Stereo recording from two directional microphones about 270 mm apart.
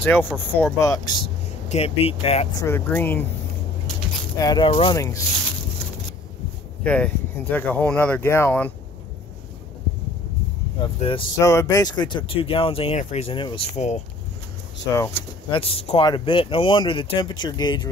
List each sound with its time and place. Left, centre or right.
0.0 s speech: centre; by 2.4 s left
2.5 s speech: centre
4.4 s speech: centre
6.8 s speech: centre
11.0 s speech: centre
15.0 s speech: centre